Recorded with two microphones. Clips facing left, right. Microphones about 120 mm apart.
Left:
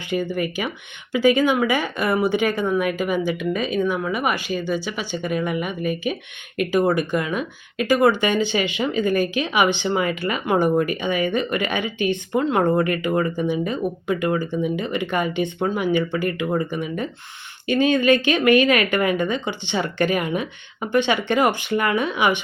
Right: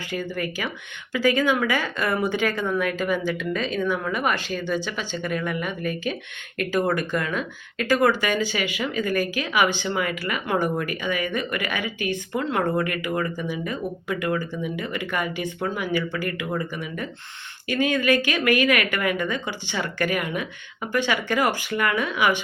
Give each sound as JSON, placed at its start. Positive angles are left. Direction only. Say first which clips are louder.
{"t": 0.1, "sound": "speech", "louder": "left 6 dB", "side_deg": 20}